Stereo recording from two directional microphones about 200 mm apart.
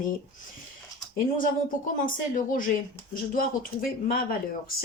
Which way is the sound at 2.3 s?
40° left (ahead or behind).